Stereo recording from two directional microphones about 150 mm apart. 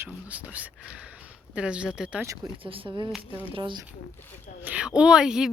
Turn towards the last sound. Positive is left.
turn(degrees=-5)  # may be behind; listen again after turning